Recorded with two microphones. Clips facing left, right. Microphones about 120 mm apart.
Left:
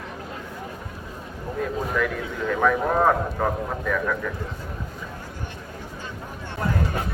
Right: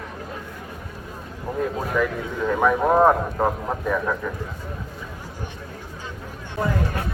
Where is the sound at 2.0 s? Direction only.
15° right (ahead or behind).